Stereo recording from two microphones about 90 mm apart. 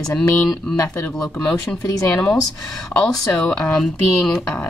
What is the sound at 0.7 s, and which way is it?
Speech, 40° left (ahead or behind).